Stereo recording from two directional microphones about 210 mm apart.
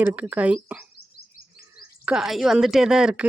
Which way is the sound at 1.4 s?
45° left (ahead or behind).